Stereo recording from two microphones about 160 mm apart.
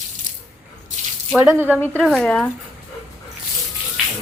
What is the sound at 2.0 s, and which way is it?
Speech, 5° left (ahead or behind).